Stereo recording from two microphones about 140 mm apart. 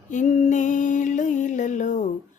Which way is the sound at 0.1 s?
60° left (ahead or behind).